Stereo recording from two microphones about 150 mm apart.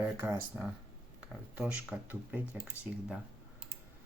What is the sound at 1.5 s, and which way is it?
Speech, 10° right (ahead or behind).